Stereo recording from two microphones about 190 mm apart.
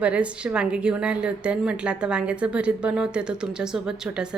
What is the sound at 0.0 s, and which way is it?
A woman's voice, 5° right (ahead or behind).